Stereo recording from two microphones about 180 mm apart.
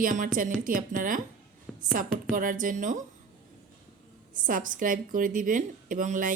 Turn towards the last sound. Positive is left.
turn(degrees=-45)  # may be behind; listen again after turning